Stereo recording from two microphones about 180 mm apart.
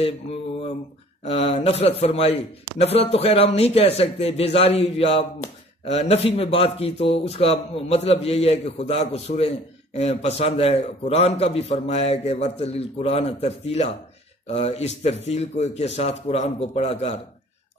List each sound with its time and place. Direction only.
1.2 s speech: 35° left (ahead or behind)